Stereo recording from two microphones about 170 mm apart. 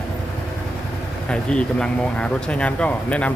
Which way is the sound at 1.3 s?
5° left (ahead or behind).